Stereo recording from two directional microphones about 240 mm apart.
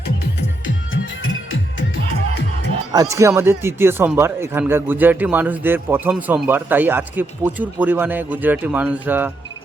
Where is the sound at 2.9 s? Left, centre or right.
Centre.